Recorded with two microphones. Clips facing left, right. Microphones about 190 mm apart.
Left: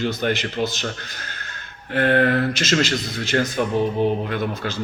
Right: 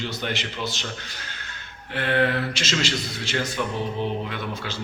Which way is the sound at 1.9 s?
50° left (ahead or behind).